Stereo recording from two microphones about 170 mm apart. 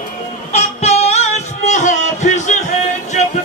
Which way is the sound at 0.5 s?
40° left (ahead or behind).